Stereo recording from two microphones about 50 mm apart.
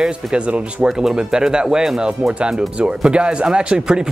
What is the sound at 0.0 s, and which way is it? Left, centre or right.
A man's voice, centre.